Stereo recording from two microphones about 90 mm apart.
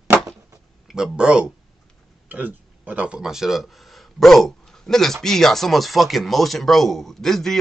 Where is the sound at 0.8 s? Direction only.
5° right (ahead or behind).